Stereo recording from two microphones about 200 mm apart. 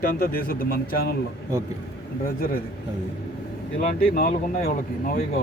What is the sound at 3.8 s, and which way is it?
A man's voice, 45° left (ahead or behind).